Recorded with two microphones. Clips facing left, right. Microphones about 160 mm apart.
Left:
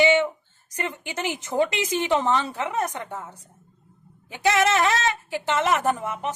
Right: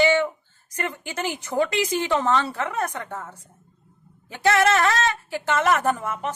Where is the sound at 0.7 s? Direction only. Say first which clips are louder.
Right 1 dB; 15° left (ahead or behind).